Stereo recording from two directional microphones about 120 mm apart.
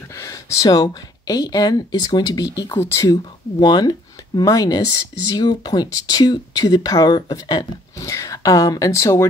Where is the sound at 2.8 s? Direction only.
20° left (ahead or behind).